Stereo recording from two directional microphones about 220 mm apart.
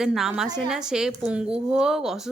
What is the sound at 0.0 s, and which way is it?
Speech, centre (ahead or behind).